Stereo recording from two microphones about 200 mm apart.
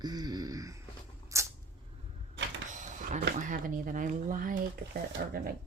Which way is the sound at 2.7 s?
40° right (ahead or behind).